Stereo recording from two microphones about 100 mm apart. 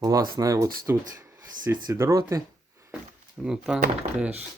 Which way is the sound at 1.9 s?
25° right (ahead or behind).